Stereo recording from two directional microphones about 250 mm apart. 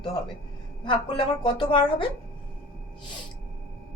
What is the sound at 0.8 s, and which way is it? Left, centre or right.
Speech, centre.